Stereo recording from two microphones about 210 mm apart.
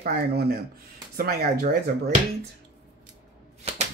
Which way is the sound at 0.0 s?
50° right (ahead or behind).